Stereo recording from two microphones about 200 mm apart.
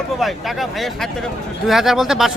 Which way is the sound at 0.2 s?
Centre (ahead or behind).